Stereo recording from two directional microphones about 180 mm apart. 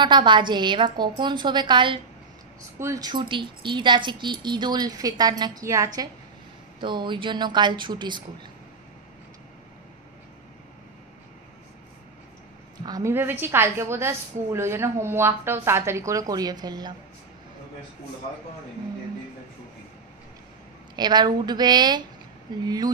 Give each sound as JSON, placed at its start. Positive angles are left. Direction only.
{"t": 0.0, "sound": "speech", "side_deg": -25}
{"t": 12.8, "sound": "a woman's voice", "side_deg": -20}
{"t": 20.9, "sound": "speech", "side_deg": -25}